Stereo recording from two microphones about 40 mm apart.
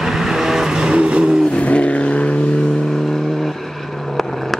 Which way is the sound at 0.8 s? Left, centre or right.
Right.